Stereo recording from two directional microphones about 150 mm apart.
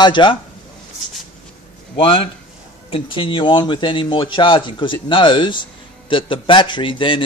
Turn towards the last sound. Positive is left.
turn(degrees=35)  # may be behind; listen again after turning